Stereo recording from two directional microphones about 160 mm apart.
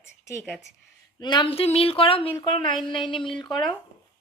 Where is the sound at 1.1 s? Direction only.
30° left (ahead or behind).